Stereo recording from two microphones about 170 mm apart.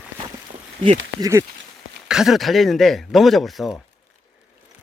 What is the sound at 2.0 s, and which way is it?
Speech, 5° right (ahead or behind).